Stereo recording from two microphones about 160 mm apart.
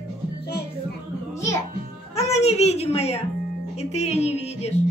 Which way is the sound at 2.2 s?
40° left (ahead or behind).